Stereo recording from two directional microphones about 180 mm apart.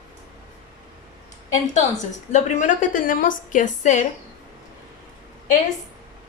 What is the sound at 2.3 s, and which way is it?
A woman's voice, 40° left (ahead or behind).